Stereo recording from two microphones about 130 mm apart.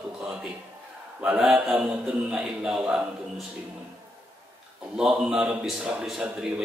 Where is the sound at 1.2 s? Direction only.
5° right (ahead or behind).